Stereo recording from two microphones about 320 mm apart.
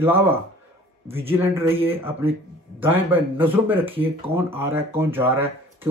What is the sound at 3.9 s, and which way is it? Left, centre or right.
Speech, centre.